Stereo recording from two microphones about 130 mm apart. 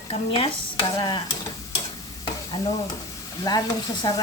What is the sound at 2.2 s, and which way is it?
Stir, 40° left (ahead or behind).